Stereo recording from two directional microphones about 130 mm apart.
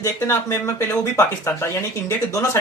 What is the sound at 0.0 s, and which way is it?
Speech, 20° left (ahead or behind).